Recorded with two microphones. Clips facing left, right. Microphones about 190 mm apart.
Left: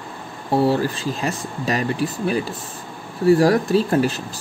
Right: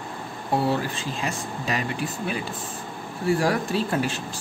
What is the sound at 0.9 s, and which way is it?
Speech, 40° left (ahead or behind).